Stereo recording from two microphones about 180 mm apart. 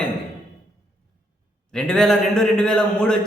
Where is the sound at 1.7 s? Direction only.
5° left (ahead or behind).